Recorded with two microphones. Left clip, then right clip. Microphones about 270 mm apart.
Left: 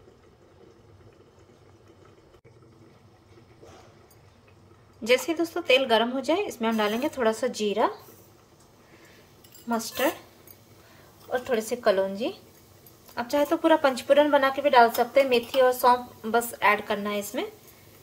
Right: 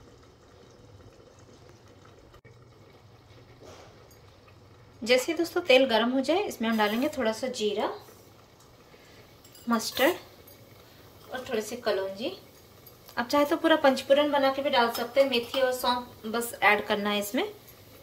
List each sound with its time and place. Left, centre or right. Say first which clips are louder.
5.0 s a woman's voice: left 1 dB; centre
9.7 s a woman's voice: right 1 dB; centre
11.4 s a woman's voice: left 5 dB; centre
13.1 s a woman's voice: even; centre